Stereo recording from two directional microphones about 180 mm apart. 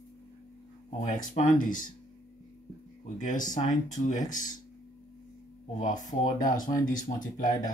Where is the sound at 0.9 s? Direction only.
40° left (ahead or behind).